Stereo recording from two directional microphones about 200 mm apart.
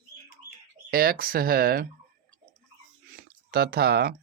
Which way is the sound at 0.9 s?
50° right (ahead or behind).